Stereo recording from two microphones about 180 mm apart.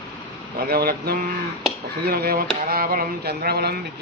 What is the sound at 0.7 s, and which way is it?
Mantra, 60° right (ahead or behind).